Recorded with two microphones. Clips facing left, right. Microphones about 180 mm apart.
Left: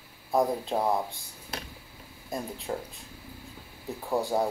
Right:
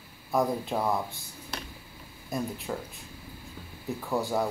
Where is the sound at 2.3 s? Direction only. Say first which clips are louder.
Right 1 dB; 25° left (ahead or behind).